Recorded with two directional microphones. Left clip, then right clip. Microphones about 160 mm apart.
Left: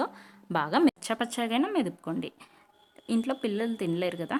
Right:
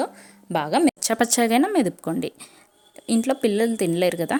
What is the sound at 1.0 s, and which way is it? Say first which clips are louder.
A woman's voice: right 10 dB; 40° right (ahead or behind).